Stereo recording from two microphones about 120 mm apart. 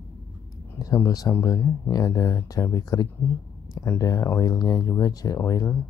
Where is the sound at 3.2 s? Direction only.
20° left (ahead or behind).